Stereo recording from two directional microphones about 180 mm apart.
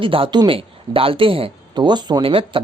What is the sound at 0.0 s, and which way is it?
Speech, 30° right (ahead or behind).